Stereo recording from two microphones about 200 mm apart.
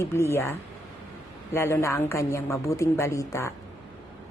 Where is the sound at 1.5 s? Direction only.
10° left (ahead or behind).